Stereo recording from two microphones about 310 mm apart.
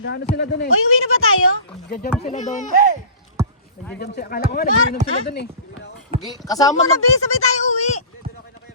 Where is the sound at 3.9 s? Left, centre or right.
Left.